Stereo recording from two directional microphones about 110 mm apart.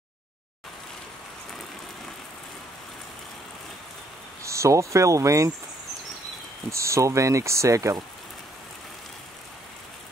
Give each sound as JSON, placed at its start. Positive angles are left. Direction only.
{"t": 4.4, "sound": "speech", "side_deg": -25}
{"t": 6.7, "sound": "speech", "side_deg": -25}